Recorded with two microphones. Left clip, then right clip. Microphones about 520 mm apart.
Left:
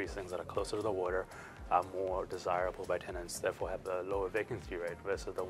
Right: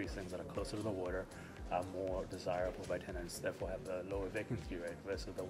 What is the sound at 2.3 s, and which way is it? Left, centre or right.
Speech, left.